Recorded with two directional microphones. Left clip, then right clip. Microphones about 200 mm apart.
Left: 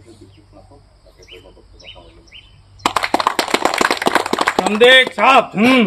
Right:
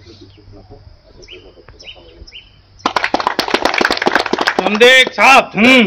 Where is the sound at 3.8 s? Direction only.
70° left (ahead or behind).